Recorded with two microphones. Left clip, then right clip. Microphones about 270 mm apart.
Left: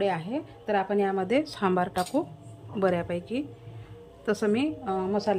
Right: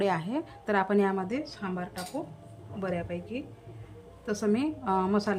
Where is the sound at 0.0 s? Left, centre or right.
Centre.